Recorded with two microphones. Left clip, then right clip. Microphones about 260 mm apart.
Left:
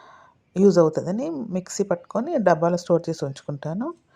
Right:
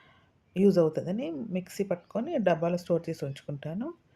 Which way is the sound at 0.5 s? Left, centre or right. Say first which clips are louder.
Left 7 dB; centre.